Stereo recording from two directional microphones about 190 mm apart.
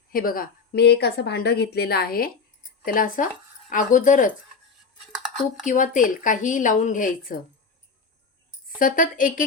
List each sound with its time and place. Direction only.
0.1 s speech: 50° left (ahead or behind)
5.6 s speech: 45° left (ahead or behind)
8.8 s speech: 45° left (ahead or behind)